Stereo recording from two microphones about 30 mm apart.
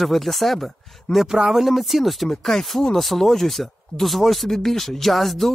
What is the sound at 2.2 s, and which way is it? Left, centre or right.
Speech, centre.